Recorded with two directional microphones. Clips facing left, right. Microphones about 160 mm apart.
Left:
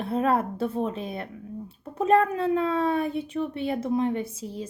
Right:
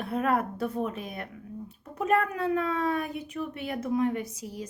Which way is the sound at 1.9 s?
30° left (ahead or behind).